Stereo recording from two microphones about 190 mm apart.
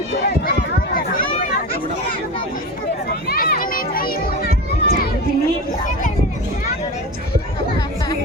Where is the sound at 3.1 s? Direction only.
55° left (ahead or behind).